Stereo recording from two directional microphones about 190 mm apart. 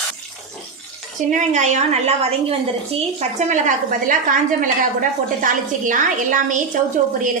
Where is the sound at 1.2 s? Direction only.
40° right (ahead or behind).